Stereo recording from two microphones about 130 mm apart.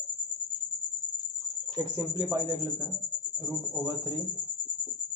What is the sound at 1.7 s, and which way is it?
Speech, 25° right (ahead or behind).